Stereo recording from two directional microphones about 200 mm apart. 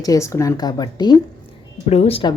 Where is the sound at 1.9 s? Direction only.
30° left (ahead or behind).